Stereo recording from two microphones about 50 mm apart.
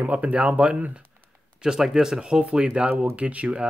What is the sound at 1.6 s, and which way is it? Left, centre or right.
Speech, centre.